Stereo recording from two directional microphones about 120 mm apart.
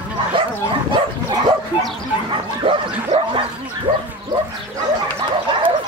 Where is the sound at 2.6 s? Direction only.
45° right (ahead or behind).